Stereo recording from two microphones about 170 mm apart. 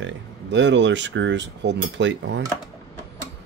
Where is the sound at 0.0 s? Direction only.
90° right.